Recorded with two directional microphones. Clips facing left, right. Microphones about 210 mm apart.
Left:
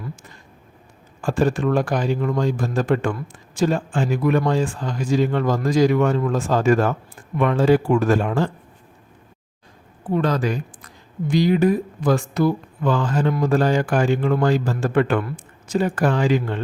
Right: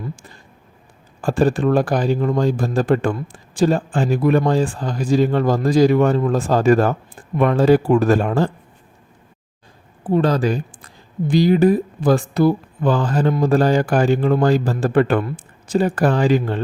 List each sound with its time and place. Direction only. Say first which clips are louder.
0.0 s a sound: right 3 dB; 30° right (ahead or behind)
1.2 s speech: right 3 dB; 35° right (ahead or behind)
10.0 s speech: right 4 dB; 30° right (ahead or behind)